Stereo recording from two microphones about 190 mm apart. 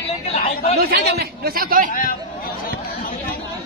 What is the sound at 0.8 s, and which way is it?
Speech, 55° right (ahead or behind).